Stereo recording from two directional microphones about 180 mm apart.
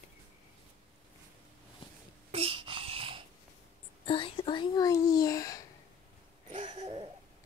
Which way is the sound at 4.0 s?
30° left (ahead or behind).